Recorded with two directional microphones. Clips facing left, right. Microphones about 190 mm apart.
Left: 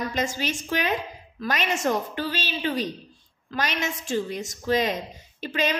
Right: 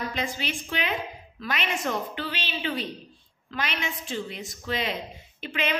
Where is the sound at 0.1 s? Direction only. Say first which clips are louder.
Left 4 dB; 45° left (ahead or behind).